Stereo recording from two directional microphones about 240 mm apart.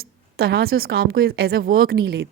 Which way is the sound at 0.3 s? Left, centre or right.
Right.